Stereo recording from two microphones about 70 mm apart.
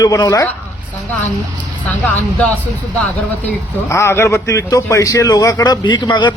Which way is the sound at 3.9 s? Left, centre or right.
Left.